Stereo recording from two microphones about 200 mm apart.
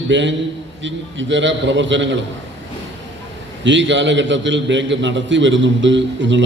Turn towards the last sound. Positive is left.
turn(degrees=-65)  # may be behind; listen again after turning